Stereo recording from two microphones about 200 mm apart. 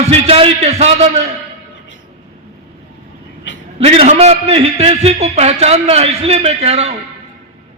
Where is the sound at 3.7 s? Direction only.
30° right (ahead or behind).